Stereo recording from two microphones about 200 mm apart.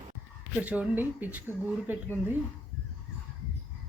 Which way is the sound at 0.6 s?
5° right (ahead or behind).